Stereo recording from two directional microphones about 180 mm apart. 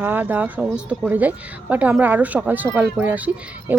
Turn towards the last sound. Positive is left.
turn(degrees=-10)  # may be behind; listen again after turning